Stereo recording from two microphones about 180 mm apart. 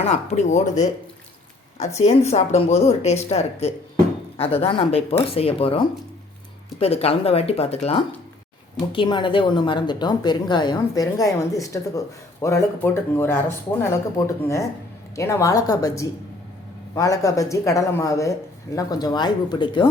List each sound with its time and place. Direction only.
0.0 s a woman's voice: 40° left (ahead or behind)